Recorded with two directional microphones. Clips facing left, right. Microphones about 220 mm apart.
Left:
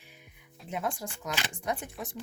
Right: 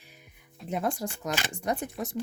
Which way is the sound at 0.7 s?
40° right (ahead or behind).